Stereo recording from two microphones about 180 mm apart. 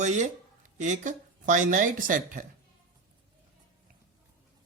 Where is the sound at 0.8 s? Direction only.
45° right (ahead or behind).